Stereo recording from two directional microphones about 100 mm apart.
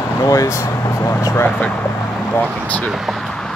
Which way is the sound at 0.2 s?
35° left (ahead or behind).